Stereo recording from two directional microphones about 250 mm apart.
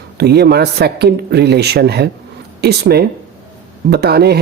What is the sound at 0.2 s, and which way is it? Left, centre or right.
Speech, right.